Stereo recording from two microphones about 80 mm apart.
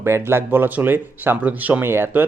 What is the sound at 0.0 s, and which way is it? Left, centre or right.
Speech, right.